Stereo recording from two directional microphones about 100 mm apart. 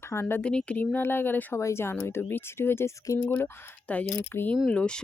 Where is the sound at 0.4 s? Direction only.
10° left (ahead or behind).